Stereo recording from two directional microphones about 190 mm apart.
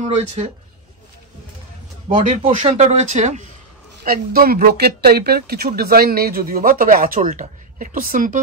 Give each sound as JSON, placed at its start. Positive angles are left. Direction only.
{"t": 0.0, "sound": "speech", "side_deg": -35}
{"t": 2.1, "sound": "speech", "side_deg": -40}
{"t": 4.0, "sound": "speech", "side_deg": -50}